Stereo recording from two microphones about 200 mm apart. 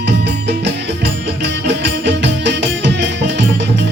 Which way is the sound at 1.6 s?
60° right (ahead or behind).